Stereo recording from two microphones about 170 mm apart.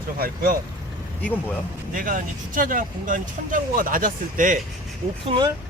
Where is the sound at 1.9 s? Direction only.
55° right (ahead or behind).